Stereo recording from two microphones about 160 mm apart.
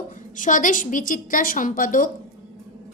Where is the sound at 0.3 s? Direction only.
55° left (ahead or behind).